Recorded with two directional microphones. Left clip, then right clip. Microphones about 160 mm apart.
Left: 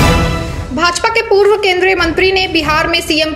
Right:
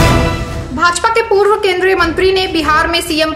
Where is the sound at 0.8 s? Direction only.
20° left (ahead or behind).